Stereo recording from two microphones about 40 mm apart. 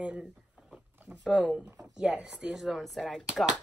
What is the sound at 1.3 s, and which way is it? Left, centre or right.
Speech, right.